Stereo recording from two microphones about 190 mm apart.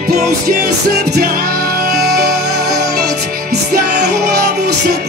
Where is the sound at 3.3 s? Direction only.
50° right (ahead or behind).